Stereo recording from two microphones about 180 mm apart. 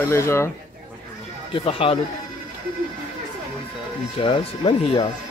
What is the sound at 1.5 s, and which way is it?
Speech, 30° left (ahead or behind).